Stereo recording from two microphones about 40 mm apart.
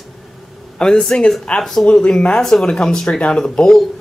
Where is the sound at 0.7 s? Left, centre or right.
Centre.